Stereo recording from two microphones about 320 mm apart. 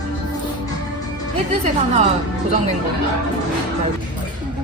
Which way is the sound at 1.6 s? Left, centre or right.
Right.